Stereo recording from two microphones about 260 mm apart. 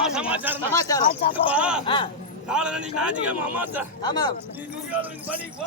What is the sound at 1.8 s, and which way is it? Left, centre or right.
Speech, centre.